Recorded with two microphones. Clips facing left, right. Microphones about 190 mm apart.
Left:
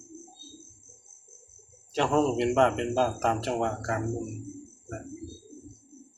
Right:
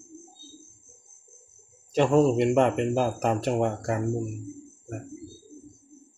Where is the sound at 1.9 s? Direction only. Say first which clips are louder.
Right 4 dB; 15° right (ahead or behind).